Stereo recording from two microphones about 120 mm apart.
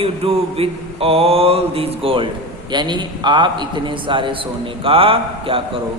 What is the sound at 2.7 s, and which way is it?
A man's voice, 40° right (ahead or behind).